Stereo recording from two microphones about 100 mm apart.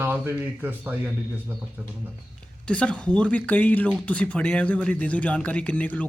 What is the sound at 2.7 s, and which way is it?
Speech, 10° left (ahead or behind).